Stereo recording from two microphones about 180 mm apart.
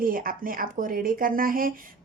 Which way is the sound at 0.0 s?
50° right (ahead or behind).